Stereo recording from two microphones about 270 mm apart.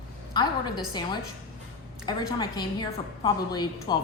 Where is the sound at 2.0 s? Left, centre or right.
Centre.